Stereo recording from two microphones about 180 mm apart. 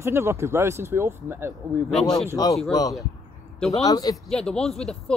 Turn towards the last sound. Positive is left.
turn(degrees=5)  # may be behind; listen again after turning